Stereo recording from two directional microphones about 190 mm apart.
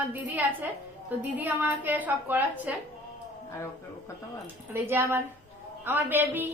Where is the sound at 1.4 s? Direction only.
10° right (ahead or behind).